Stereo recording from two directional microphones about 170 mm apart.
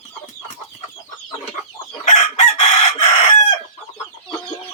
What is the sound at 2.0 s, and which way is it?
Chicken, 45° left (ahead or behind).